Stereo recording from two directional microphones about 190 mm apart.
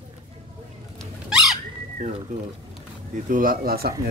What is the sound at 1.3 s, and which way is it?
Bird, centre (ahead or behind).